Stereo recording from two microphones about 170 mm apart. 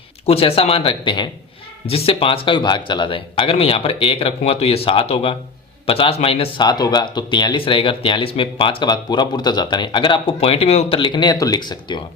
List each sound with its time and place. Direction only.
0.3 s speech: 35° left (ahead or behind)